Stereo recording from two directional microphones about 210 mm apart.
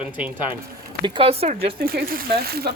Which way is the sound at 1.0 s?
25° right (ahead or behind).